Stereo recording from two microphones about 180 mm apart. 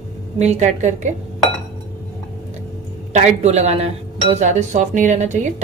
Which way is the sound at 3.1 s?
40° right (ahead or behind).